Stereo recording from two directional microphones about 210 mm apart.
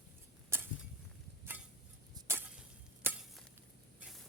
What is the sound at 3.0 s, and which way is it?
Chop, centre (ahead or behind).